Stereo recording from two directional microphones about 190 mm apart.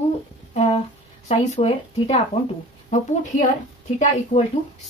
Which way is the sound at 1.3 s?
35° left (ahead or behind).